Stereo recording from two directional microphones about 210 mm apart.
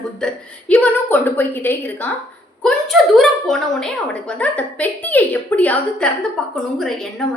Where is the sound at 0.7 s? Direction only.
10° left (ahead or behind).